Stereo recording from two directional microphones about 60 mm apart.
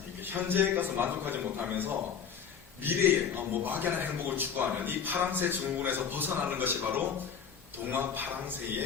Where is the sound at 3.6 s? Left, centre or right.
Right.